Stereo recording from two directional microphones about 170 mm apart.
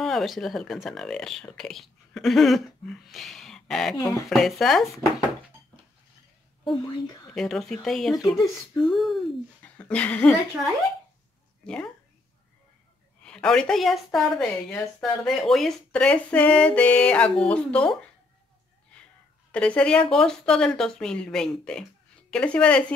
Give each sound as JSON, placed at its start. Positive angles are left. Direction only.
{"t": 0.0, "sound": "a woman's voice", "side_deg": 0}
{"t": 6.6, "sound": "a woman's voice", "side_deg": 25}
{"t": 7.3, "sound": "a woman's voice", "side_deg": 0}
{"t": 13.2, "sound": "a woman's voice", "side_deg": 5}
{"t": 19.5, "sound": "a woman's voice", "side_deg": 5}